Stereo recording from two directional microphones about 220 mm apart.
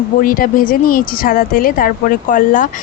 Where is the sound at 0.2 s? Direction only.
40° left (ahead or behind).